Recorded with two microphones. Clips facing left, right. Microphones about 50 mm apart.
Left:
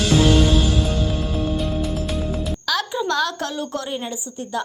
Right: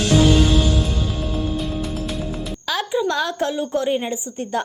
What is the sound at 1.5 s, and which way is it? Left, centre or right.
Music, centre.